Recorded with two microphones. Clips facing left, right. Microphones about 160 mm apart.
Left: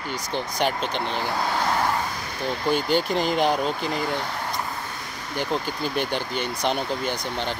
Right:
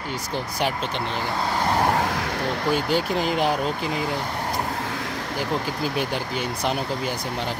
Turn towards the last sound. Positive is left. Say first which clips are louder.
# even
turn(degrees=-5)  # may be behind; listen again after turning